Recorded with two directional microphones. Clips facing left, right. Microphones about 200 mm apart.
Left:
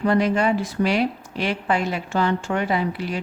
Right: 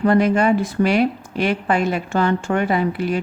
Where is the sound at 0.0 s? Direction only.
50° right (ahead or behind).